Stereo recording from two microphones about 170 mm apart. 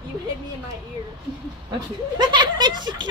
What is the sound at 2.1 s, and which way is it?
Speech, 25° right (ahead or behind).